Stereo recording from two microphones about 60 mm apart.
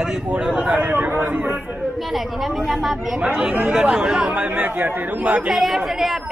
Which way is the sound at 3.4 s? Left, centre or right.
Centre.